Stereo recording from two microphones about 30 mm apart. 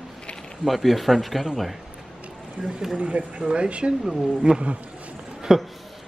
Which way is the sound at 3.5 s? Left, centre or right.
Right.